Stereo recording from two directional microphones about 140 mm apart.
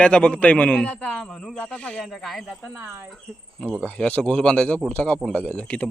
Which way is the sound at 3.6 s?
5° left (ahead or behind).